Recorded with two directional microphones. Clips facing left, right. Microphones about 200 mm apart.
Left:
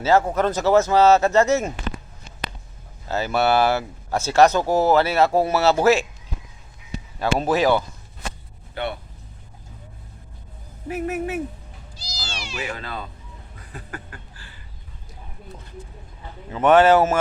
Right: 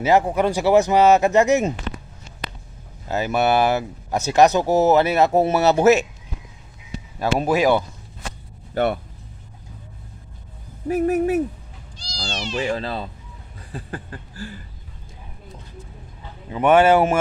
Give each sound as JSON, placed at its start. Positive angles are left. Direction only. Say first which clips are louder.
{"t": 0.0, "sound": "speech", "louder": "right 1 dB", "side_deg": -15}
{"t": 3.1, "sound": "speech", "louder": "right 1 dB", "side_deg": -15}
{"t": 7.2, "sound": "speech", "louder": "right 1 dB", "side_deg": -10}
{"t": 8.7, "sound": "speech", "louder": "right 8 dB", "side_deg": -45}
{"t": 10.8, "sound": "speech", "louder": "right 7 dB", "side_deg": -40}
{"t": 11.9, "sound": "cat", "louder": "right 5 dB", "side_deg": 5}
{"t": 12.5, "sound": "speech", "louder": "right 7 dB", "side_deg": -30}
{"t": 13.6, "sound": "a sound", "louder": "right 5 dB", "side_deg": -30}
{"t": 16.5, "sound": "speech", "louder": "even", "side_deg": -10}